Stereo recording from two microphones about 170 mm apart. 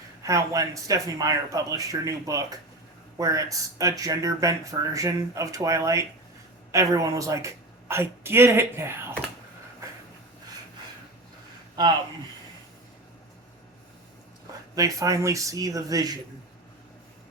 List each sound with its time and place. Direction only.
0.2 s a woman's voice: 20° right (ahead or behind)
14.8 s speech: 20° right (ahead or behind)